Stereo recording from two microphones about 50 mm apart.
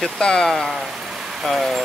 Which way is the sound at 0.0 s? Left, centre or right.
Centre.